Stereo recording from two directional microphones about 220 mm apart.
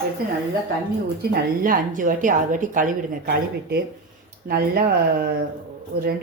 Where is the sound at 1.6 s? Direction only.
40° right (ahead or behind).